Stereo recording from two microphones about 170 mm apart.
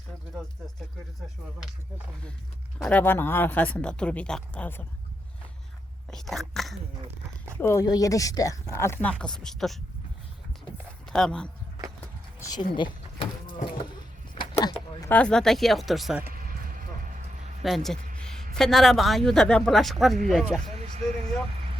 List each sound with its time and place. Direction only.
2.7 s speech: 5° left (ahead or behind)
6.1 s speech: centre (ahead or behind)
7.6 s speech: 20° left (ahead or behind); by 9.7 s centre (ahead or behind)
11.0 s speech: 5° left (ahead or behind)
12.4 s speech: 20° left (ahead or behind)
12.7 s vehicle: 30° left (ahead or behind)
14.3 s a sound: 25° left (ahead or behind)
15.1 s speech: 5° left (ahead or behind)
16.2 s vehicle: 55° right (ahead or behind)
17.6 s a woman's voice: centre (ahead or behind)